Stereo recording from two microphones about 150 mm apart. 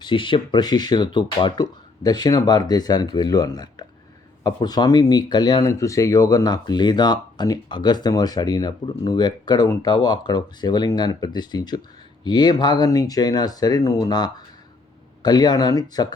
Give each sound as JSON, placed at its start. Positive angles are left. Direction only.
{"t": 0.0, "sound": "speech", "side_deg": 30}